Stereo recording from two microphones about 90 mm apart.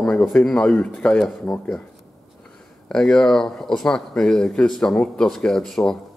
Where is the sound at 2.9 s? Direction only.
5° left (ahead or behind).